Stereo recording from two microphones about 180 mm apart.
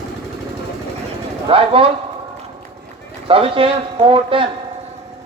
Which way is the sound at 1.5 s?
30° right (ahead or behind).